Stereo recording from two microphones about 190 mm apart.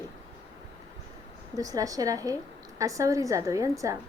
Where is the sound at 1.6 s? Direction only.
20° right (ahead or behind).